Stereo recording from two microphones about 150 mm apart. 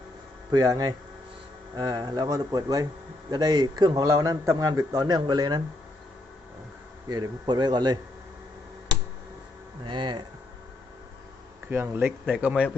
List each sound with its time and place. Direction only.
0.5 s a man's voice: 25° right (ahead or behind)
7.1 s a man's voice: 30° right (ahead or behind)
9.8 s speech: 30° right (ahead or behind)
11.7 s speech: 15° right (ahead or behind)